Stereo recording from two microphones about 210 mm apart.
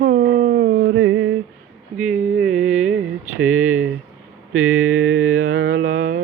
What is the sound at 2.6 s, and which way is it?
Mantra, 80° right.